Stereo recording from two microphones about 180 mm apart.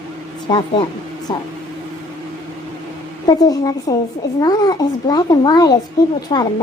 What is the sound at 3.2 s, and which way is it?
A woman's voice, 20° left (ahead or behind).